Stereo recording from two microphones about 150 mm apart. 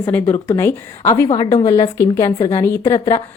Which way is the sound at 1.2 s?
30° left (ahead or behind).